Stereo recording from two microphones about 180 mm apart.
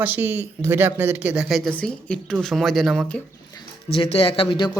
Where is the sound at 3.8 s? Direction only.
30° left (ahead or behind).